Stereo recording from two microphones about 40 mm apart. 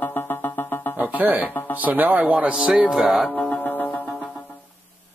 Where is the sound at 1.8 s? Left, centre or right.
Right.